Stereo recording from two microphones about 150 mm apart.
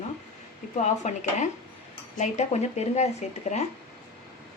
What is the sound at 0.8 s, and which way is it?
Stir, 50° left (ahead or behind).